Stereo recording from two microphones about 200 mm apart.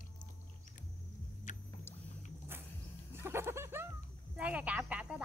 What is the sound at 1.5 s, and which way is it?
Vehicle, 40° left (ahead or behind).